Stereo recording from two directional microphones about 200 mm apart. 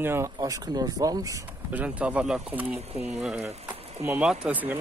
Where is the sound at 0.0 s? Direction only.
15° right (ahead or behind).